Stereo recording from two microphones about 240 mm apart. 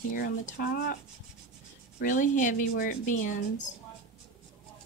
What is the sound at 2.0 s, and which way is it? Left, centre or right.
Speech, left.